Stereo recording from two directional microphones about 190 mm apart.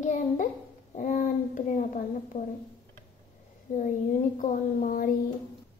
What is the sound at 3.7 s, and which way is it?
A child's voice, 40° left (ahead or behind).